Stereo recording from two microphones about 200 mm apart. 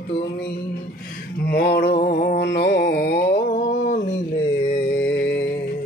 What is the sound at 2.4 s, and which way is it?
Mantra, 60° left (ahead or behind).